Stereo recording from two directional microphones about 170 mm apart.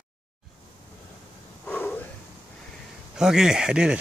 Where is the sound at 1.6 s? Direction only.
10° left (ahead or behind).